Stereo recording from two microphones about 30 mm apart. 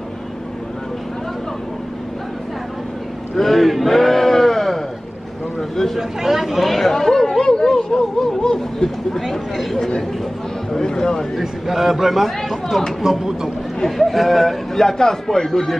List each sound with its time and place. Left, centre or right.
3.3 s a sound: centre
5.9 s speech: centre
6.7 s chatter: centre
7.4 s a sound: left
7.7 s a sound: centre
10.7 s a man's voice: centre
11.3 s a man's voice: centre
13.0 s speech: centre
13.8 s a man's voice: centre